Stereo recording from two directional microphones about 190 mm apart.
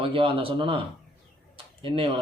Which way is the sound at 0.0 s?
30° right (ahead or behind).